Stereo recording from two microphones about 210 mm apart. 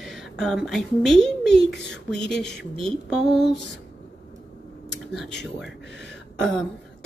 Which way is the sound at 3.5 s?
55° left (ahead or behind).